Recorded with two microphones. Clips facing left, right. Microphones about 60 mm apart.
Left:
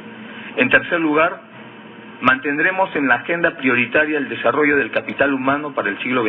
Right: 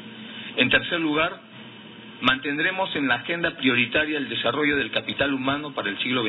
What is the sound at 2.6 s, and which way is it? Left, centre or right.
Speech, left.